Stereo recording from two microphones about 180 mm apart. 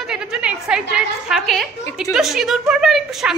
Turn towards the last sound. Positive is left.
turn(degrees=0)  # may be behind; listen again after turning